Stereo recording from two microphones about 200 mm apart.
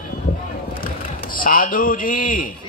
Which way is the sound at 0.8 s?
45° left (ahead or behind).